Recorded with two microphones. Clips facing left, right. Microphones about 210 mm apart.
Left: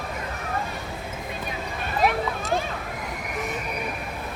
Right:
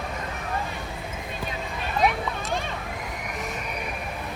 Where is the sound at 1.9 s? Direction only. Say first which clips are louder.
Left 1 dB; centre (ahead or behind).